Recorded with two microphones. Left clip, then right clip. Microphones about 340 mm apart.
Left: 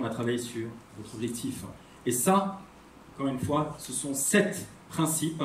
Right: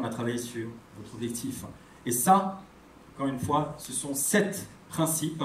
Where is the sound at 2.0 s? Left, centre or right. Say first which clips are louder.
Right 4 dB; centre.